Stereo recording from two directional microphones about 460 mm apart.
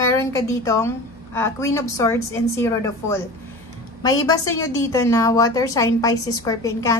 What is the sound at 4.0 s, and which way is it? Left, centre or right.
A woman's voice, centre.